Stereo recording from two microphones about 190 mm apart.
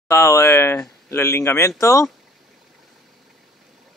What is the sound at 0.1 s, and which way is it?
Speech, 15° left (ahead or behind).